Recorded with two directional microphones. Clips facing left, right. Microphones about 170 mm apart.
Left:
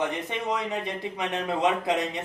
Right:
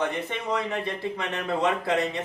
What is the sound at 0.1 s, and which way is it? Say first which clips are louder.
Speech: even; 15° left (ahead or behind).